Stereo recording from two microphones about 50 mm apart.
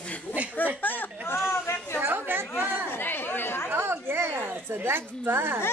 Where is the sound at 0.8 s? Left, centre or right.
Left.